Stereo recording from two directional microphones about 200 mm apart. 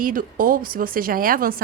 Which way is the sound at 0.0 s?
45° right (ahead or behind).